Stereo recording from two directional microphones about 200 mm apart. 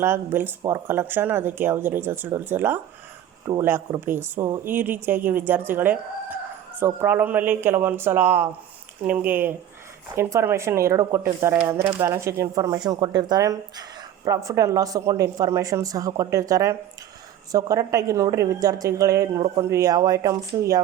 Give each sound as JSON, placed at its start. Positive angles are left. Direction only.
{"t": 0.0, "sound": "speech", "side_deg": -10}